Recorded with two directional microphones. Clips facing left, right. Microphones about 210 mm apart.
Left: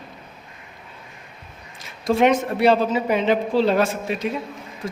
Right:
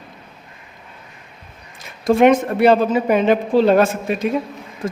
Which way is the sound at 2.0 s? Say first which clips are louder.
Right 5 dB; 50° right (ahead or behind).